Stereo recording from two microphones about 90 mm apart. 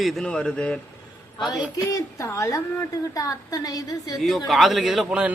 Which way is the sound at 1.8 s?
35° left (ahead or behind).